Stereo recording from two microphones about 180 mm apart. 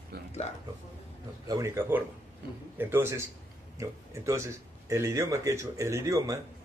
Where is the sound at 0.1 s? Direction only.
60° right (ahead or behind).